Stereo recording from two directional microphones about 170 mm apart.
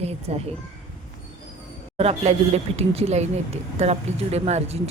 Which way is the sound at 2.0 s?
35° right (ahead or behind).